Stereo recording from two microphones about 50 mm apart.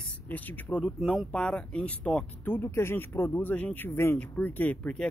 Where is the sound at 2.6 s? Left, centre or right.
Left.